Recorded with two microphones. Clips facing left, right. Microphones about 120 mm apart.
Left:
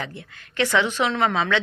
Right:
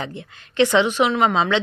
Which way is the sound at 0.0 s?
25° right (ahead or behind).